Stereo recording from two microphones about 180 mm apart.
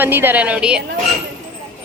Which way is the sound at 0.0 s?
10° right (ahead or behind).